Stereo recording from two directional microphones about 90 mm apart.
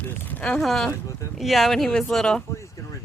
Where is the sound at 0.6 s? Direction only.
Centre (ahead or behind).